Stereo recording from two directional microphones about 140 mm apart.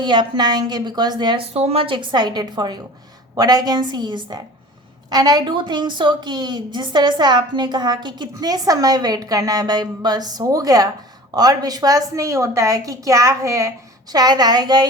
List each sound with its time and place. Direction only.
0.0 s a woman's voice: 35° right (ahead or behind)
1.5 s a woman's voice: 45° right (ahead or behind); by 14.8 s 30° right (ahead or behind)